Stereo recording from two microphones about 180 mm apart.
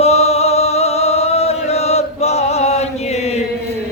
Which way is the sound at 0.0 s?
35° left (ahead or behind).